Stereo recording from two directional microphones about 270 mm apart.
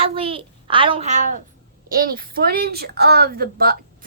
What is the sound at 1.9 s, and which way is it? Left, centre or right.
A woman's voice, right.